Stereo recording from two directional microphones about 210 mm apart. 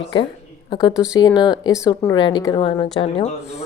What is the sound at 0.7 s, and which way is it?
Speech, 20° left (ahead or behind).